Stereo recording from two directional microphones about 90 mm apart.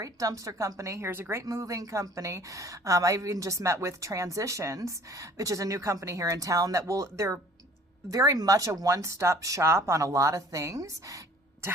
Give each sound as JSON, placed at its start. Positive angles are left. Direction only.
{"t": 0.0, "sound": "a woman's voice", "side_deg": -40}
{"t": 1.5, "sound": "a woman's voice", "side_deg": -40}